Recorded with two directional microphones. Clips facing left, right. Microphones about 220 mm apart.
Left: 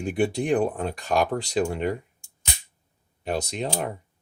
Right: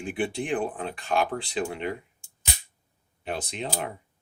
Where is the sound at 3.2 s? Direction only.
40° left (ahead or behind).